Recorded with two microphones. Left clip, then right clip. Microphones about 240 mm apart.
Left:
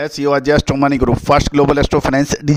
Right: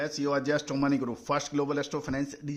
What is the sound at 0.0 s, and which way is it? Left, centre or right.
A man's voice, left.